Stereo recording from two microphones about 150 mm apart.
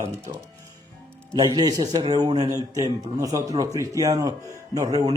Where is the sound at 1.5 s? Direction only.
25° right (ahead or behind).